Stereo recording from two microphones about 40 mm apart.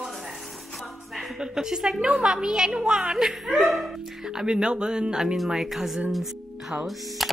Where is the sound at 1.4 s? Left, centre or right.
Centre.